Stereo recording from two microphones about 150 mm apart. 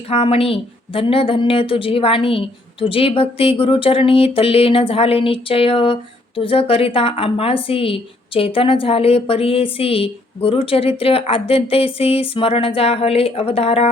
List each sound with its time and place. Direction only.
0.1 s speech: 40° left (ahead or behind)